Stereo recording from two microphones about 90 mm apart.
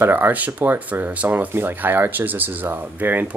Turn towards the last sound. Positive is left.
turn(degrees=-20)  # may be behind; listen again after turning